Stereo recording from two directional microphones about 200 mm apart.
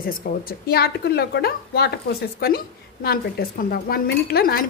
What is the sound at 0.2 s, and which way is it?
Speech, 45° left (ahead or behind).